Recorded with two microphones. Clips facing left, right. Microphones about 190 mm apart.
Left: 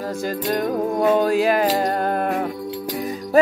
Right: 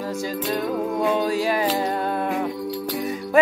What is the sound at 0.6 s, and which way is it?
Music, 45° left (ahead or behind).